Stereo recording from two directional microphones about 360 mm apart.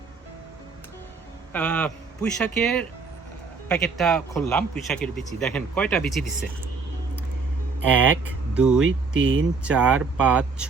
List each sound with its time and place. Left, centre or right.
1.5 s a man's voice: centre
8.5 s speech: centre
8.8 s speech: right
9.6 s a man's voice: centre